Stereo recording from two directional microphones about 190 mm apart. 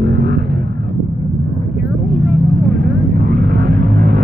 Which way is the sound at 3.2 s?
55° right (ahead or behind).